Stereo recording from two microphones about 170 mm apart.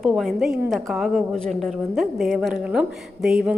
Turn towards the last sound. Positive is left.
turn(degrees=0)  # may be behind; listen again after turning